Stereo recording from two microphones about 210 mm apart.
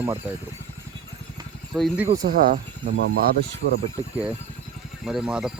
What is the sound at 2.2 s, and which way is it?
Speech, 40° right (ahead or behind).